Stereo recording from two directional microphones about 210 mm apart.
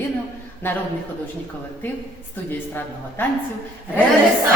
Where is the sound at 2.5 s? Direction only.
10° left (ahead or behind).